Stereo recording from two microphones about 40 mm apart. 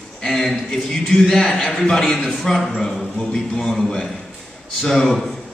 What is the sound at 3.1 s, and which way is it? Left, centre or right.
Speech, centre.